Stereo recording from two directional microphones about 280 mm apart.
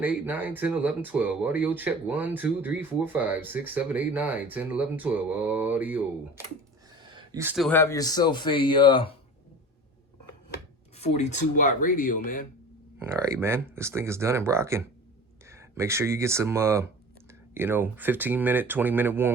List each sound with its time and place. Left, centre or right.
0.0 s speech: centre
10.9 s speech: left
13.0 s speech: centre